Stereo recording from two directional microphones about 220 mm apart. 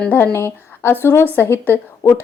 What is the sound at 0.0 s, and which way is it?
A woman's voice, 10° left (ahead or behind).